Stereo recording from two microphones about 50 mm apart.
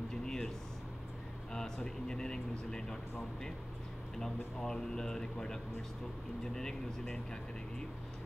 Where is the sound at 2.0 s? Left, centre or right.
Centre.